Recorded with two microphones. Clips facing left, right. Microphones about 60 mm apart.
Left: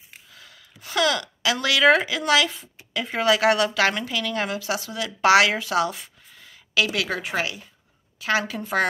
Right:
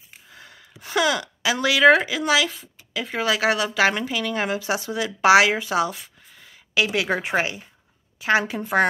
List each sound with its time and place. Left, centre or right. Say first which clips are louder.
0.3 s gasp: right 7 dB; right
0.7 s a woman's voice: right 1 dB; centre
5.9 s a sound: left 1 dB; centre
6.7 s a woman's voice: right 2 dB; centre